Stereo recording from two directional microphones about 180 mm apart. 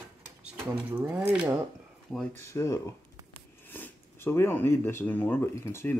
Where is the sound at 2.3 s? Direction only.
15° left (ahead or behind).